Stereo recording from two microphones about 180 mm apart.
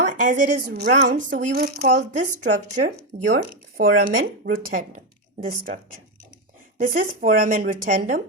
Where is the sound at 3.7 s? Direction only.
55° right (ahead or behind).